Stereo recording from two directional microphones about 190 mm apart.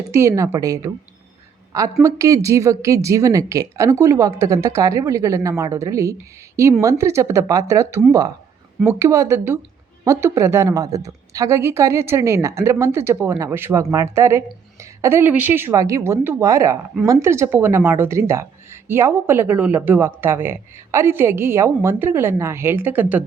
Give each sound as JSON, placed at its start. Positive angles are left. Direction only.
{"t": 0.2, "sound": "speech", "side_deg": -15}
{"t": 2.0, "sound": "speech", "side_deg": -15}